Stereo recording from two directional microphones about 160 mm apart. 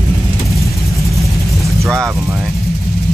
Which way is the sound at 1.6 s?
Centre (ahead or behind).